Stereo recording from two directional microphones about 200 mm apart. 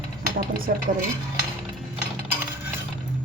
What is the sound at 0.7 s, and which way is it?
Speech, 45° right (ahead or behind).